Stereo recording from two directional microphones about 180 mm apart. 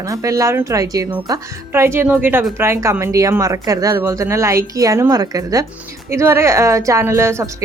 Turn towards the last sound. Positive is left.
turn(degrees=-15)  # may be behind; listen again after turning